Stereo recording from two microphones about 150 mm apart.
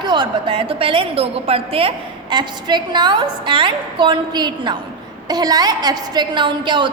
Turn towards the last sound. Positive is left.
turn(degrees=-30)  # may be behind; listen again after turning